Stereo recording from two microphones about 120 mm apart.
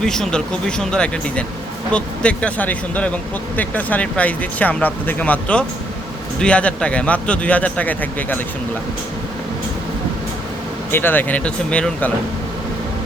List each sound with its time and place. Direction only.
0.0 s speech: 5° left (ahead or behind)
10.9 s speech: 15° left (ahead or behind)